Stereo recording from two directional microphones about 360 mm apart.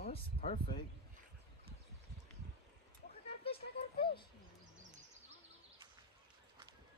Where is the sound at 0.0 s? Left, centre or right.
Centre.